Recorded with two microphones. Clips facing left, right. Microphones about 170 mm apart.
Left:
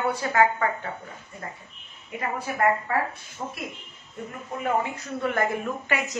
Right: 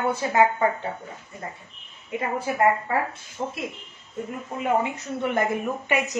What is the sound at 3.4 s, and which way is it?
Speech, 25° right (ahead or behind).